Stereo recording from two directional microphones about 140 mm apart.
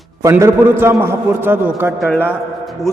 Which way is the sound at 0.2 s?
20° right (ahead or behind).